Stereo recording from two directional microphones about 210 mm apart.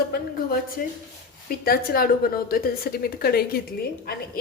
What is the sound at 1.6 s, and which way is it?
A woman's voice, 45° left (ahead or behind).